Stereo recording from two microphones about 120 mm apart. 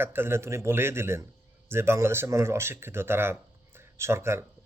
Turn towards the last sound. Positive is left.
turn(degrees=-20)  # may be behind; listen again after turning